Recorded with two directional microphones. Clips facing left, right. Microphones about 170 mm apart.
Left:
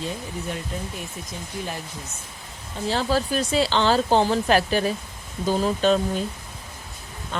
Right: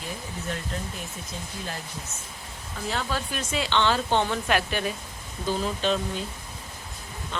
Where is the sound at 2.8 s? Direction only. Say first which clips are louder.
Left 7 dB; 30° left (ahead or behind).